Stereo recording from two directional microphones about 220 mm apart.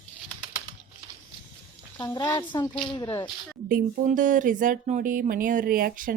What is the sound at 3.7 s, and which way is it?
Speech, 40° right (ahead or behind).